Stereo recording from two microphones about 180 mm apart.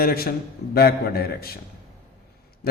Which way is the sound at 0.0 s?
55° left (ahead or behind).